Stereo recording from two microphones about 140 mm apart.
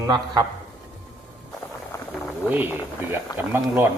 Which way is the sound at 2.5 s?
15° right (ahead or behind).